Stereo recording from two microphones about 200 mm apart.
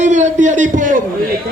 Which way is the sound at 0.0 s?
35° right (ahead or behind).